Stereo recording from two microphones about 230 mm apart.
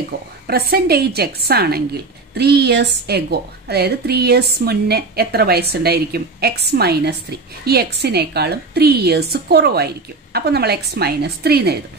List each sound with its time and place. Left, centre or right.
0.1 s a woman's voice: right